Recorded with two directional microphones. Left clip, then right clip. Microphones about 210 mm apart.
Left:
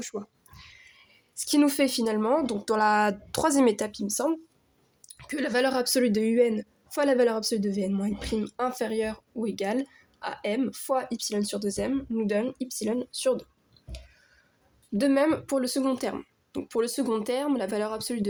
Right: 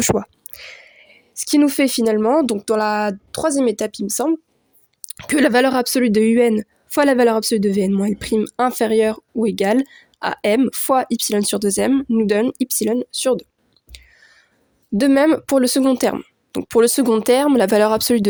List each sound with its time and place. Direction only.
0.0 s speech: 55° right (ahead or behind)
2.6 s speech: 25° right (ahead or behind)
3.9 s speech: 50° right (ahead or behind)
14.9 s speech: 50° right (ahead or behind)